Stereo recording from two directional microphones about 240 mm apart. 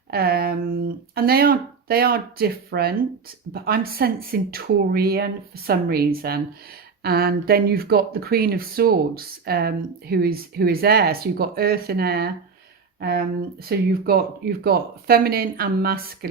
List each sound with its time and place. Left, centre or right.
0.1 s speech: right